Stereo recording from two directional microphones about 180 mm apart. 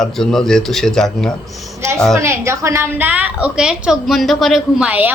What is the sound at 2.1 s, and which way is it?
A woman's voice, 15° right (ahead or behind).